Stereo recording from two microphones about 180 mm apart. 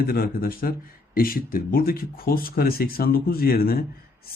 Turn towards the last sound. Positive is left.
turn(degrees=55)  # may be behind; listen again after turning